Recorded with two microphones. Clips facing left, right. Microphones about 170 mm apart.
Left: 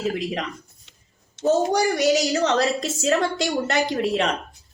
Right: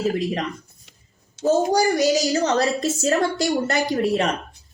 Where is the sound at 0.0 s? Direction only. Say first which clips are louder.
Right 3 dB; centre (ahead or behind).